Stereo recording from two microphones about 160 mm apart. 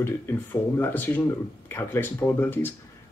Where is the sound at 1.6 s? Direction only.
15° left (ahead or behind).